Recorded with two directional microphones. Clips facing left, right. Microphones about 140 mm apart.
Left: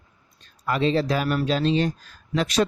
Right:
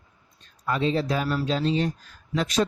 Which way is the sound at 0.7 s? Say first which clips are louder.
Left 2 dB; 80° left.